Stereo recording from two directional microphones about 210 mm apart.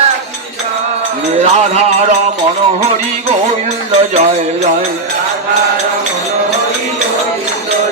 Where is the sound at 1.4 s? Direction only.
30° right (ahead or behind).